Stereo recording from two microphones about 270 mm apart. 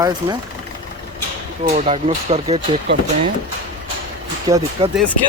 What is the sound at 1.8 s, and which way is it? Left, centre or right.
Speech, right.